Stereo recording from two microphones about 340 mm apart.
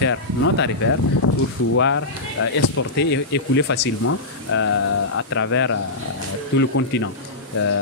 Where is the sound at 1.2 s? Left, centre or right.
Left.